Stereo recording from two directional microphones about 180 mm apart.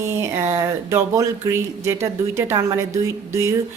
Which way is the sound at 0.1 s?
15° right (ahead or behind).